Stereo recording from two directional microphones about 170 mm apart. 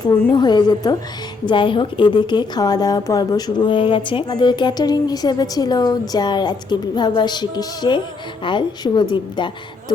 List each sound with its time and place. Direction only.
0.0 s a woman's voice: 25° left (ahead or behind)